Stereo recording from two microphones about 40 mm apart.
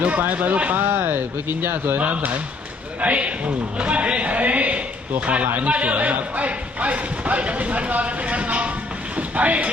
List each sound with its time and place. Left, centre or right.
0.0 s speech: right
0.8 s speech: right
2.0 s speech: right
9.1 s a sound: right